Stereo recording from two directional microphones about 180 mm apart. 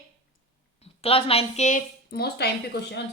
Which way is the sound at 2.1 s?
65° left (ahead or behind).